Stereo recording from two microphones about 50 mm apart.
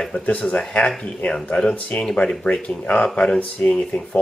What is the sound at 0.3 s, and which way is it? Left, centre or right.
Speech, left.